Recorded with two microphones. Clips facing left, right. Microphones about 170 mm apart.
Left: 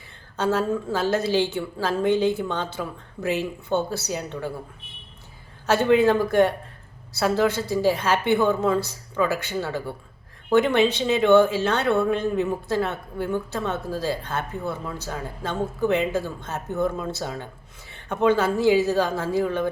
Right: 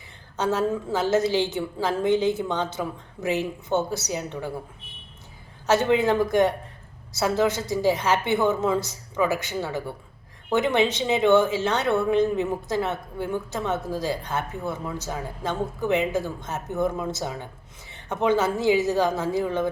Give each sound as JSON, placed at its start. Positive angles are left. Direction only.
{"t": 0.3, "sound": "a woman's voice", "side_deg": -15}
{"t": 5.6, "sound": "a woman's voice", "side_deg": -15}